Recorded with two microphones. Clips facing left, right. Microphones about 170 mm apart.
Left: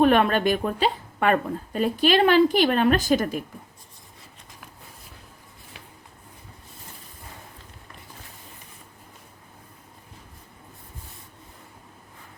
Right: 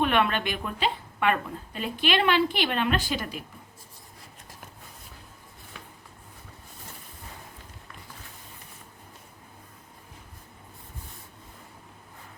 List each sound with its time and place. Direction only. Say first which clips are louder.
0.0 s a woman's voice: left 6 dB; 40° left (ahead or behind)